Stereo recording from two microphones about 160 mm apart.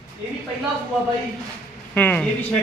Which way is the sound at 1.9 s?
10° left (ahead or behind).